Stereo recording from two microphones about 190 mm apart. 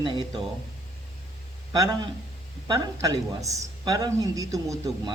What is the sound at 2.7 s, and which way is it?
A woman's voice, 20° right (ahead or behind).